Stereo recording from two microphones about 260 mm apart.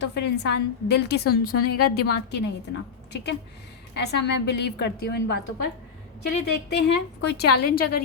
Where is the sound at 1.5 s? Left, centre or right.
Left.